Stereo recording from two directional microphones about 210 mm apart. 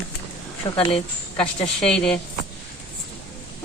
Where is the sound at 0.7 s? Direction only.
25° left (ahead or behind).